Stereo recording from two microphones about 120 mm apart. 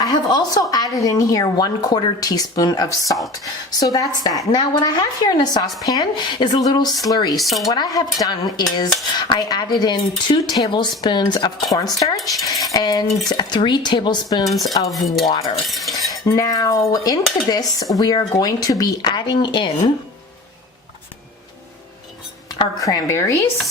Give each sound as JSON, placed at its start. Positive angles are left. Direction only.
{"t": 0.0, "sound": "a woman's voice", "side_deg": 35}
{"t": 7.3, "sound": "cutlery", "side_deg": 0}
{"t": 7.6, "sound": "speech", "side_deg": 30}
{"t": 14.4, "sound": "cutlery", "side_deg": 0}
{"t": 16.2, "sound": "speech", "side_deg": 30}
{"t": 22.8, "sound": "a woman's voice", "side_deg": 30}